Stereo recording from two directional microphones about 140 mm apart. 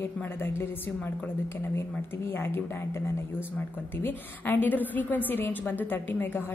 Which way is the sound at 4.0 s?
15° left (ahead or behind).